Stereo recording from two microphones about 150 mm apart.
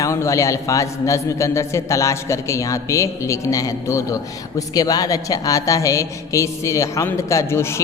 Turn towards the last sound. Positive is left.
turn(degrees=15)  # may be behind; listen again after turning